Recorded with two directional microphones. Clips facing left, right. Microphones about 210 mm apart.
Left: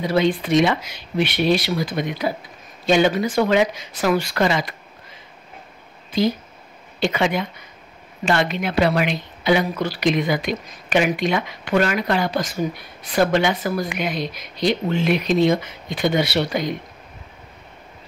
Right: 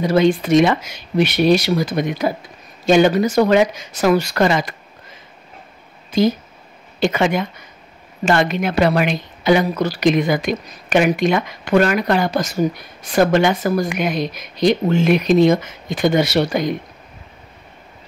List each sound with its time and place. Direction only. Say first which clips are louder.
0.0 s speech: right 4 dB; 45° right (ahead or behind)
7.0 s speech: right 3 dB; 45° right (ahead or behind)